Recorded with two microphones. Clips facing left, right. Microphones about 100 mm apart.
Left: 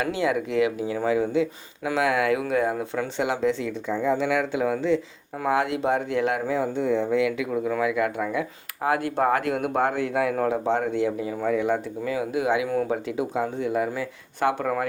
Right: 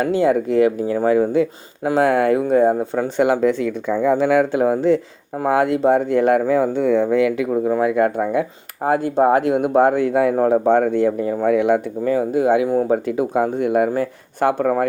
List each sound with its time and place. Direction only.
0.0 s speech: 40° right (ahead or behind); by 11.8 s 65° right (ahead or behind)
12.0 s speech: 40° right (ahead or behind)
12.9 s speech: 50° right (ahead or behind)